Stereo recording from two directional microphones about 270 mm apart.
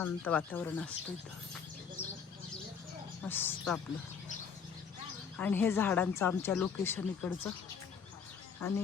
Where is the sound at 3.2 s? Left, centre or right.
Centre.